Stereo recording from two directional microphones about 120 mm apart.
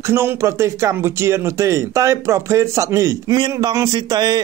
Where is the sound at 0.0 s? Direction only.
20° right (ahead or behind).